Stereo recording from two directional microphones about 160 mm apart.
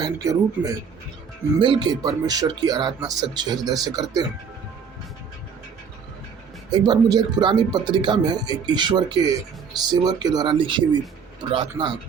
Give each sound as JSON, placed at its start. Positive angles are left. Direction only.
{"t": 0.0, "sound": "speech", "side_deg": -20}
{"t": 6.7, "sound": "speech", "side_deg": -25}